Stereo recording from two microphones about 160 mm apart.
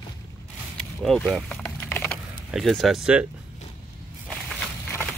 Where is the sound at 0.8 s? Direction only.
5° left (ahead or behind).